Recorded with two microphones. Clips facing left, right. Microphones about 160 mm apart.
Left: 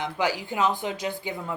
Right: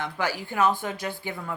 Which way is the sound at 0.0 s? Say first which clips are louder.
Left 2 dB; 15° left (ahead or behind).